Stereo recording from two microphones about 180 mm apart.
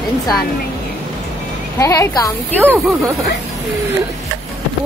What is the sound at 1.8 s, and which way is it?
Speech, 15° left (ahead or behind).